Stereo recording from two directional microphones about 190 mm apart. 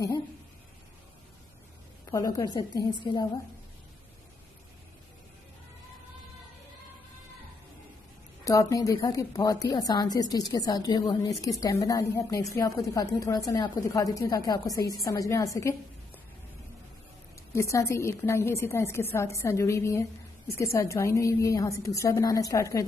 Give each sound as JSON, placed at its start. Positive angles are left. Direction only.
{"t": 2.0, "sound": "a woman's voice", "side_deg": 20}
{"t": 8.5, "sound": "a woman's voice", "side_deg": 15}
{"t": 17.5, "sound": "a woman's voice", "side_deg": 15}